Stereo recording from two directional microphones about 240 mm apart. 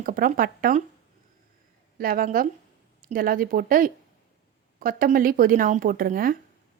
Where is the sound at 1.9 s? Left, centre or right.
Right.